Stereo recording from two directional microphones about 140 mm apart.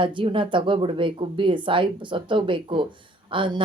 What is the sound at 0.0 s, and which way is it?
Speech, 35° right (ahead or behind).